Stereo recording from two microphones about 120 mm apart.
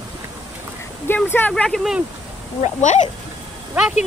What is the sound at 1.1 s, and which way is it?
Speech, 15° left (ahead or behind).